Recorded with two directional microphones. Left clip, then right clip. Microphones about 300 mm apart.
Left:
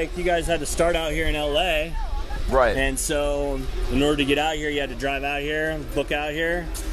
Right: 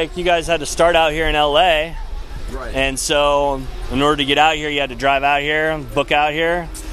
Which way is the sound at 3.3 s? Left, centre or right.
Right.